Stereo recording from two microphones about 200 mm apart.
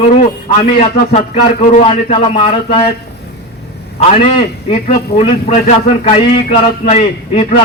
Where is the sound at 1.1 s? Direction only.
35° left (ahead or behind).